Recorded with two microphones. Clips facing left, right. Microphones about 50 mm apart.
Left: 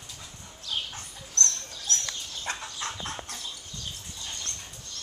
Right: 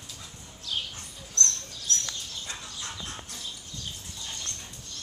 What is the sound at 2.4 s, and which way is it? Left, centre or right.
Chicken, left.